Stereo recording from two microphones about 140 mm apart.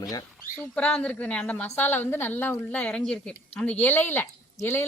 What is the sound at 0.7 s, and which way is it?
A woman's voice, 10° left (ahead or behind).